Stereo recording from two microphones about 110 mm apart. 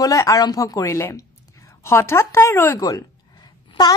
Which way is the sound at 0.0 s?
30° left (ahead or behind).